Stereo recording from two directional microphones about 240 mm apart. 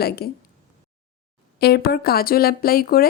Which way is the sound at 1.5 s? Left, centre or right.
Left.